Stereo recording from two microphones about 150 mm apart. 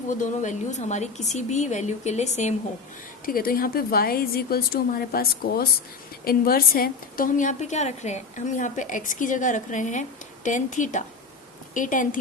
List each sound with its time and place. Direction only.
0.1 s speech: 55° left (ahead or behind)
3.2 s a woman's voice: 75° left (ahead or behind)